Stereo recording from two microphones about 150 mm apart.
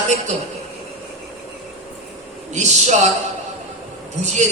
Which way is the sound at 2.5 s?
50° right (ahead or behind).